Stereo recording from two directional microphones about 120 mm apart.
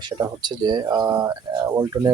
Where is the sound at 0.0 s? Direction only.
35° right (ahead or behind).